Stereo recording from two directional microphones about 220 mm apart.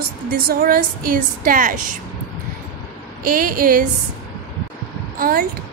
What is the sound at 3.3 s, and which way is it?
Speech, 40° right (ahead or behind).